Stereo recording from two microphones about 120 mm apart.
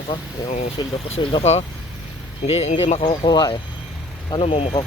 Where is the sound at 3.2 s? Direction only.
40° left (ahead or behind).